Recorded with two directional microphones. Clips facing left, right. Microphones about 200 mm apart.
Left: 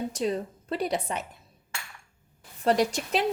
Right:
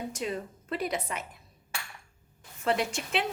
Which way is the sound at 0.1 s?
35° left (ahead or behind).